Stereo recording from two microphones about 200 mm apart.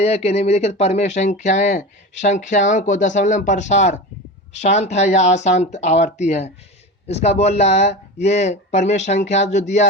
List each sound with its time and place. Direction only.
0.0 s speech: 30° left (ahead or behind)